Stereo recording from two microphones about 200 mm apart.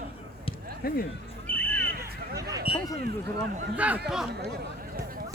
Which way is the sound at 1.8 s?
50° right (ahead or behind).